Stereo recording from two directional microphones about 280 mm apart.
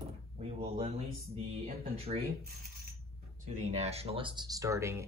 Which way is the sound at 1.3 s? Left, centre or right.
Right.